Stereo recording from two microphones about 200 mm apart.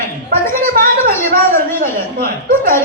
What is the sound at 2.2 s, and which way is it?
Speech, 45° right (ahead or behind).